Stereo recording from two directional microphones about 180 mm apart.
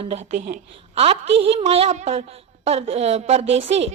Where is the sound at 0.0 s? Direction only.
35° right (ahead or behind).